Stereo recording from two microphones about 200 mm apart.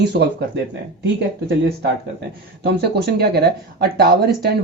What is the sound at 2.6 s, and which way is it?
Speech, 55° right (ahead or behind).